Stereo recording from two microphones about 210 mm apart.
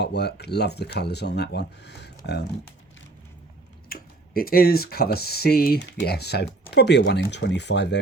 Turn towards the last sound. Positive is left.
turn(degrees=55)  # may be behind; listen again after turning